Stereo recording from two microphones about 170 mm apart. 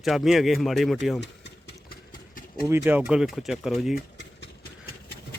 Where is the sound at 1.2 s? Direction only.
80° left.